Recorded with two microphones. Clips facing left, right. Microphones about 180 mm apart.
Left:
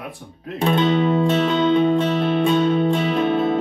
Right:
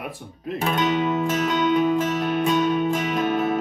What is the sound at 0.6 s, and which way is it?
Music, 30° left (ahead or behind).